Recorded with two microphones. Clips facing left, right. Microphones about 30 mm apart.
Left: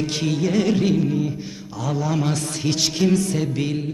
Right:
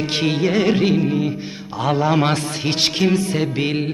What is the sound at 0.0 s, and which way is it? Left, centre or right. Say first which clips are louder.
A man's voice: right 3 dB; right.